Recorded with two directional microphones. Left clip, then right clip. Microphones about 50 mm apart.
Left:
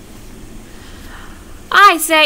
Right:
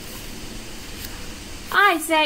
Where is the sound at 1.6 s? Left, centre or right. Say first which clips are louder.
Left 9 dB; left.